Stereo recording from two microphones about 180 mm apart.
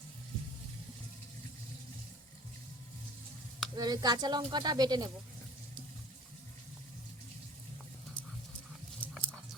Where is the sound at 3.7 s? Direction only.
20° right (ahead or behind).